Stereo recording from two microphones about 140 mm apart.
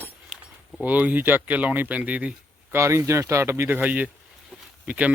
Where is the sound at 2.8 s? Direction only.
20° right (ahead or behind).